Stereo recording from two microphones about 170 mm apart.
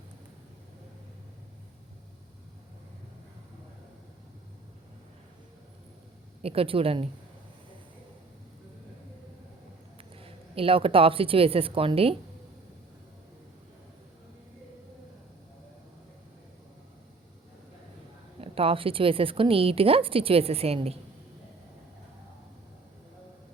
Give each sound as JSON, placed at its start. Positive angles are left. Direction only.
{"t": 6.4, "sound": "a woman's voice", "side_deg": -35}
{"t": 10.0, "sound": "speech", "side_deg": -35}
{"t": 18.3, "sound": "a woman's voice", "side_deg": -35}